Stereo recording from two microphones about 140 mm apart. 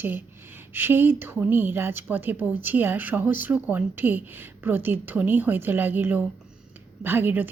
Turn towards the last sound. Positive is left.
turn(degrees=-15)  # may be behind; listen again after turning